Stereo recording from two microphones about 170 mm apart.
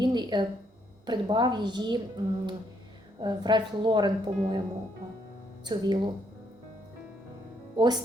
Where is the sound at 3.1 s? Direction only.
25° right (ahead or behind).